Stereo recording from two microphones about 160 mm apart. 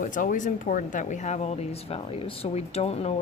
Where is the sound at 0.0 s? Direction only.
55° left (ahead or behind).